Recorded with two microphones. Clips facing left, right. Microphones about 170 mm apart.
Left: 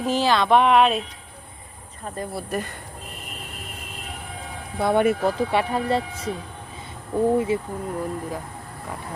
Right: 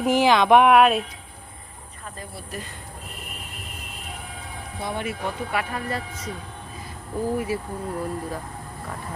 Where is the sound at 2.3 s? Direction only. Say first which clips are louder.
Left 9 dB; 55° left (ahead or behind).